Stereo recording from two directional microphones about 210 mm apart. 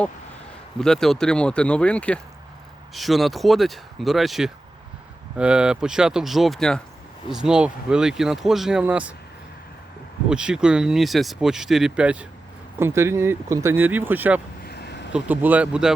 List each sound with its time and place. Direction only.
0.8 s speech: centre (ahead or behind)
10.2 s speech: 5° right (ahead or behind)
14.7 s a sound: 50° left (ahead or behind)
15.1 s speech: 10° right (ahead or behind)